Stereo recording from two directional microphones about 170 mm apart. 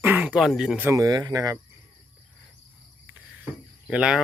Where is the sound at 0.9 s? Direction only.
20° right (ahead or behind).